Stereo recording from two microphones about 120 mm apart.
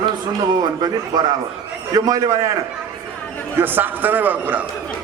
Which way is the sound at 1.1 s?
35° right (ahead or behind).